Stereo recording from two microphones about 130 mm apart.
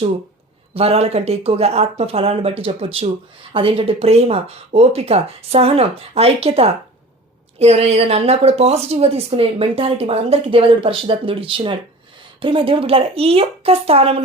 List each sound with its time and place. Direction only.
0.7 s a woman's voice: 50° right (ahead or behind)